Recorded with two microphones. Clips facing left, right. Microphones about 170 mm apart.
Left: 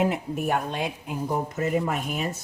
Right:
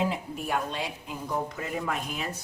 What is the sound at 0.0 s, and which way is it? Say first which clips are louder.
Speech: left 5 dB; 55° left (ahead or behind).